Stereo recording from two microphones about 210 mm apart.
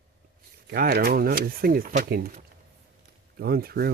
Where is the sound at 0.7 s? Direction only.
45° right (ahead or behind).